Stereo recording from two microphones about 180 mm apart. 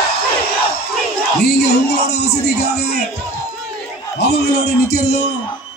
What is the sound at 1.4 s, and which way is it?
Speech, 65° left (ahead or behind).